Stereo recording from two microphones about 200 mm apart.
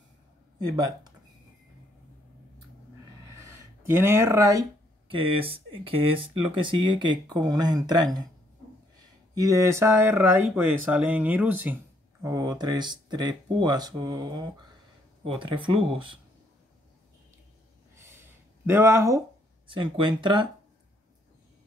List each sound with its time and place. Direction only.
0.7 s speech: 20° right (ahead or behind)
3.3 s speech: 10° right (ahead or behind)
9.3 s speech: 15° right (ahead or behind)
18.7 s speech: 10° right (ahead or behind)